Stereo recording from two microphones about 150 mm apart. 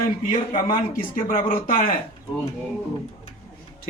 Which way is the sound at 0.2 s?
65° left (ahead or behind).